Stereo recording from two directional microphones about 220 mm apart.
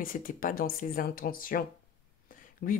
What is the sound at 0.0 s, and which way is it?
Speech, 40° left (ahead or behind).